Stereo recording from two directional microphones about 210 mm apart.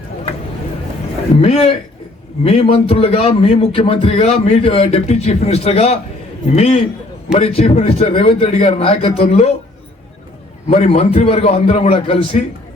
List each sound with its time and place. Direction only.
1.4 s a man's voice: 30° left (ahead or behind)
10.7 s a man's voice: 30° left (ahead or behind)